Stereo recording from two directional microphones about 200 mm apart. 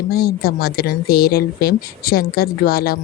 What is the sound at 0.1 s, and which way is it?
Speech, 50° left (ahead or behind).